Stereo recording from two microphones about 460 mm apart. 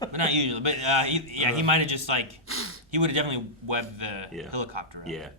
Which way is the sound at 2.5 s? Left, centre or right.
Right.